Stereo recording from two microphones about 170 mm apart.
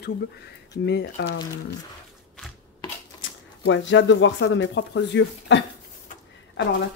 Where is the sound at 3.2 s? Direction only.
90° left.